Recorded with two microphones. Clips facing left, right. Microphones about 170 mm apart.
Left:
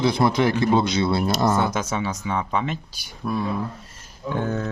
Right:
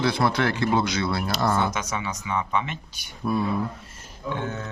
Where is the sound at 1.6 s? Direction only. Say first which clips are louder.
Left 3 dB; 30° left (ahead or behind).